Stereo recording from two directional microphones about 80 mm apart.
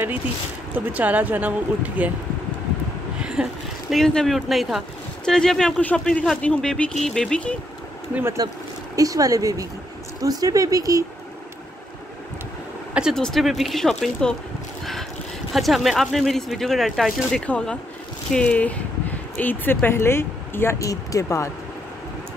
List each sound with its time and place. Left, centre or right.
0.7 s speech: centre
3.2 s vehicle: centre
3.9 s speech: centre
8.4 s speech: right
8.9 s speech: right
13.1 s speech: centre
15.5 s speech: centre
17.5 s speech: centre; by 20.7 s left
20.8 s speech: left